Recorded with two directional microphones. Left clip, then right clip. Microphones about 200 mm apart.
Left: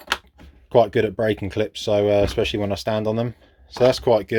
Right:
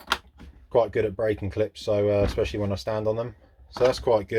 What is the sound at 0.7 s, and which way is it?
Speech, 40° left (ahead or behind).